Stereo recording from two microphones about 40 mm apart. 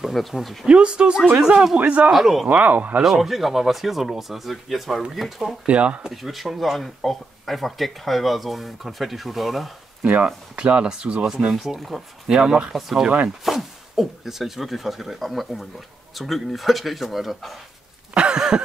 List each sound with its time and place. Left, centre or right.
0.1 s speech: centre
0.7 s speech: right
1.8 s speech: right
2.1 s speech: centre
2.4 s speech: right
3.0 s speech: centre
5.7 s speech: right
6.2 s speech: centre
10.0 s speech: right
10.6 s speech: right
12.7 s speech: centre
18.1 s a sound: right